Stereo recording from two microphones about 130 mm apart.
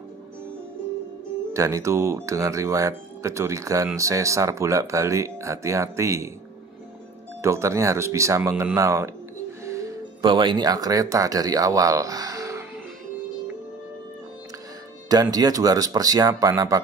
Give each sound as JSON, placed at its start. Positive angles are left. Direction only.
{"t": 1.5, "sound": "speech", "side_deg": -25}
{"t": 7.4, "sound": "speech", "side_deg": -20}
{"t": 10.2, "sound": "speech", "side_deg": -35}
{"t": 15.3, "sound": "speech", "side_deg": -25}